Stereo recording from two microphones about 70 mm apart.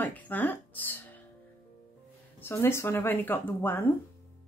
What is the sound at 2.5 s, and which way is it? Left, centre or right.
Speech, left.